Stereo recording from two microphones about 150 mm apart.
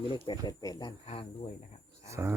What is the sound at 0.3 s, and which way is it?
Speech, 25° left (ahead or behind).